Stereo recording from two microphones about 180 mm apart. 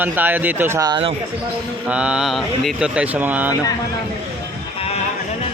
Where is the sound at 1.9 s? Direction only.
5° right (ahead or behind).